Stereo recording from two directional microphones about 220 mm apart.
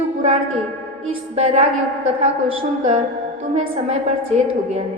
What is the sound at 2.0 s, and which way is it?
Speech, 65° right (ahead or behind).